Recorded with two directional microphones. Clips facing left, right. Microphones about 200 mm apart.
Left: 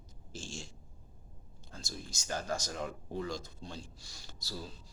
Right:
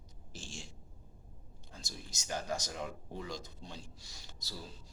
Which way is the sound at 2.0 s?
20° right (ahead or behind).